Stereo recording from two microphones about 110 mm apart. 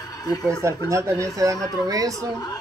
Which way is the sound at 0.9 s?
25° right (ahead or behind).